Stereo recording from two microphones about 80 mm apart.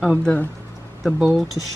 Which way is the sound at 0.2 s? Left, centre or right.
Centre.